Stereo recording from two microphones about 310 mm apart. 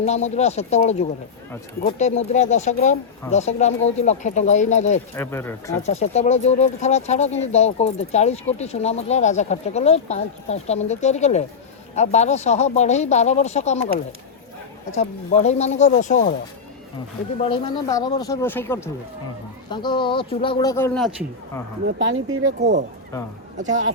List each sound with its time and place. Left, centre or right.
0.0 s speech: left
5.1 s speech: centre
5.8 s speech: left
14.9 s speech: left
17.4 s speech: centre
21.8 s speech: right
23.1 s speech: centre